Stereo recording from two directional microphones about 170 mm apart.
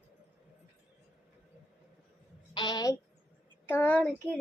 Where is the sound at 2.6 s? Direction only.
25° left (ahead or behind).